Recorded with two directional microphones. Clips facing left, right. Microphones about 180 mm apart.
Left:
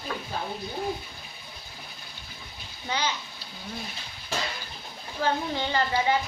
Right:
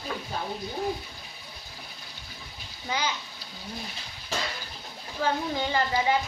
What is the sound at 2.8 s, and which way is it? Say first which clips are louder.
Speech: left 1 dB; 10° right (ahead or behind).